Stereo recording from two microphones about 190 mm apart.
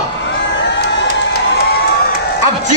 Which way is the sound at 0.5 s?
70° left (ahead or behind).